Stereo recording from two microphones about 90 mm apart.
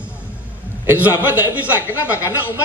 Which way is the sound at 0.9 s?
20° right (ahead or behind).